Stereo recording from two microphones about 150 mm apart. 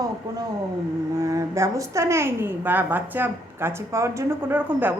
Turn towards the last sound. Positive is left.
turn(degrees=-10)  # may be behind; listen again after turning